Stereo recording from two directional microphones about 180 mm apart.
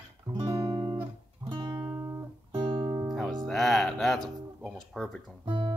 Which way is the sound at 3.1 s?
Centre (ahead or behind).